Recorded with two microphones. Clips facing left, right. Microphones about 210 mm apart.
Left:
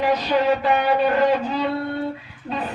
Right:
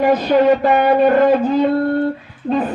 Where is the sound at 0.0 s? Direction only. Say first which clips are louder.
Right 7 dB; 50° right (ahead or behind).